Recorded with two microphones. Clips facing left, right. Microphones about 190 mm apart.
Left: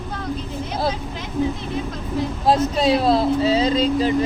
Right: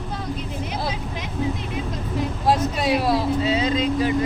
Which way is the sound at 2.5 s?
25° left (ahead or behind).